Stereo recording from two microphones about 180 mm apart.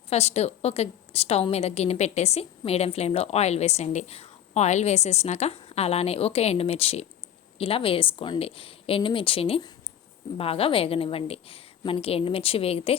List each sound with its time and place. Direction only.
0.1 s a woman's voice: 35° left (ahead or behind)